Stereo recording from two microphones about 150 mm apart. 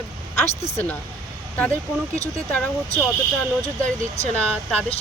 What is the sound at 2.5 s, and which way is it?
Speech, 10° left (ahead or behind).